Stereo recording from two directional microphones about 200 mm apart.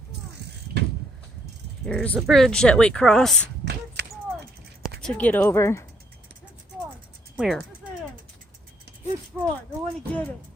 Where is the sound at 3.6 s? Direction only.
55° right (ahead or behind).